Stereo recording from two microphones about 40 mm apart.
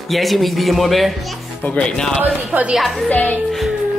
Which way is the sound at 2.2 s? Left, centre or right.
Right.